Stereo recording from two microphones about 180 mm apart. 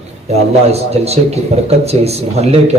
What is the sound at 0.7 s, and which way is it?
A man's voice, 35° right (ahead or behind).